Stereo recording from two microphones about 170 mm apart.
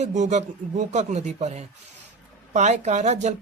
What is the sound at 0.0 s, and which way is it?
Speech, 45° right (ahead or behind).